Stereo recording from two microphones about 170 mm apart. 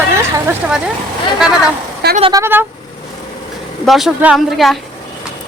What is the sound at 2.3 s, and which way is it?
Speech, 15° right (ahead or behind).